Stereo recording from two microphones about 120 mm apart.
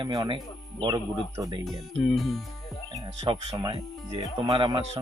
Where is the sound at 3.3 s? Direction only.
40° right (ahead or behind).